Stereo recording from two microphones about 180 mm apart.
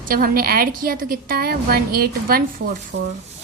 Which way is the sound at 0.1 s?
55° right (ahead or behind).